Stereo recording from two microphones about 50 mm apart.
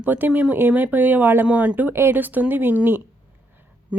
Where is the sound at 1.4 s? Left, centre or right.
Right.